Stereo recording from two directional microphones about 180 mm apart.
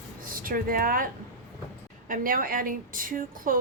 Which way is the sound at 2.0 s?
50° right (ahead or behind).